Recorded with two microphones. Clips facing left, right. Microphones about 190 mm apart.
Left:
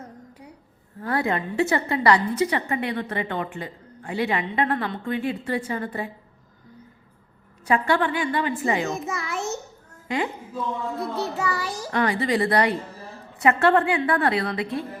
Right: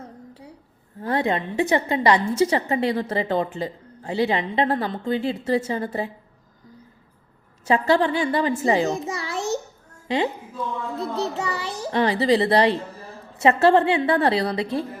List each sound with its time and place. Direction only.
0.0 s a sound: 30° right (ahead or behind)
1.0 s a woman's voice: 20° right (ahead or behind)
7.7 s a child's voice: 25° right (ahead or behind)
10.9 s a woman's voice: 25° right (ahead or behind)